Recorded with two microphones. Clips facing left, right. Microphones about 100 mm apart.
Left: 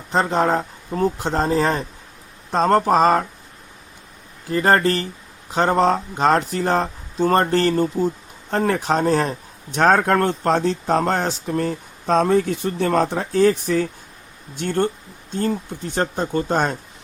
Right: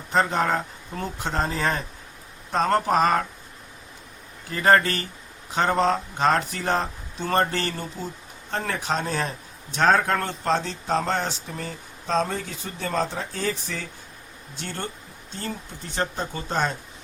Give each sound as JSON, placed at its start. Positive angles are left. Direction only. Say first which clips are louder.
{"t": 0.1, "sound": "speech", "louder": "left 4 dB", "side_deg": 35}
{"t": 4.4, "sound": "speech", "louder": "left 3 dB", "side_deg": 35}